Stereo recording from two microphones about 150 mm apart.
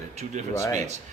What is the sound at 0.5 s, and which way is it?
Speech, 20° left (ahead or behind).